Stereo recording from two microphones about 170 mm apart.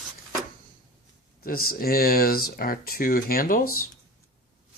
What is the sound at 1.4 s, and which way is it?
Speech, 60° left (ahead or behind).